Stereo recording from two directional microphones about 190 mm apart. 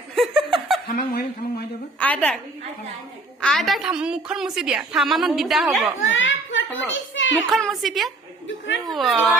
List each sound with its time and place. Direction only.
0.2 s chuckle: centre (ahead or behind)
0.9 s speech: 55° left (ahead or behind)
2.0 s a woman's voice: 5° left (ahead or behind)
3.4 s a woman's voice: centre (ahead or behind)
6.0 s a child's voice: 90° left
7.5 s a woman's voice: centre (ahead or behind)
8.4 s a sound: 75° left (ahead or behind)
8.9 s a woman's voice: centre (ahead or behind)